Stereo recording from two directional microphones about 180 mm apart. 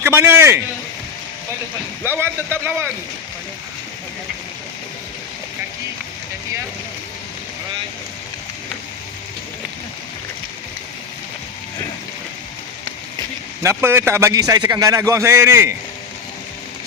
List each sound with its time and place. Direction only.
0.0 s a man's voice: 10° right (ahead or behind)
2.0 s a man's voice: 10° right (ahead or behind)
13.6 s a man's voice: 15° right (ahead or behind)